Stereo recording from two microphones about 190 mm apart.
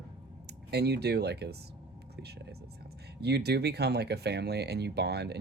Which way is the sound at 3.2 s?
60° right (ahead or behind).